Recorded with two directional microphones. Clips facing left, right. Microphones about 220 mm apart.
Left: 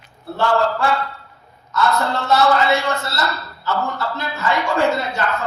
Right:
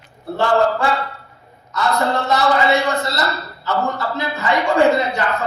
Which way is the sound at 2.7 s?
15° right (ahead or behind).